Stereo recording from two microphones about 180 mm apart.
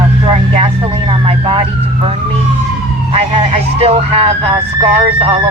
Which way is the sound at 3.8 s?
35° right (ahead or behind).